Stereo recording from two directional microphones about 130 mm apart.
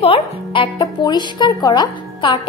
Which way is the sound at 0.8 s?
35° left (ahead or behind).